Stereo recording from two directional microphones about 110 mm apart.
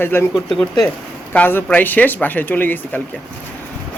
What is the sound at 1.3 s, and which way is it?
Speech, 15° left (ahead or behind).